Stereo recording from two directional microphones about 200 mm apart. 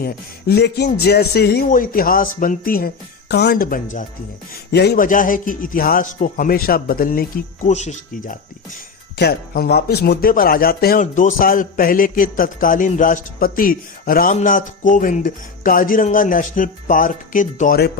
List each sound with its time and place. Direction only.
0.0 s speech: 50° left (ahead or behind)
4.7 s speech: 55° left (ahead or behind); by 8.4 s 35° left (ahead or behind)
9.1 s speech: 55° left (ahead or behind)